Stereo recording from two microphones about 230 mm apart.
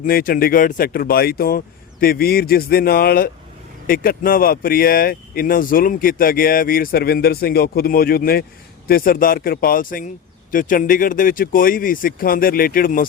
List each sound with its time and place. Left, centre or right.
0.1 s speech: left